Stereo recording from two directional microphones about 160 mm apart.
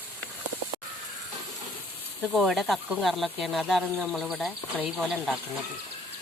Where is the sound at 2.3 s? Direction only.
5° right (ahead or behind).